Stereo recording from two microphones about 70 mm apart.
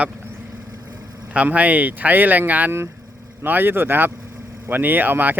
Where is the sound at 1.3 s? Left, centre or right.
Centre.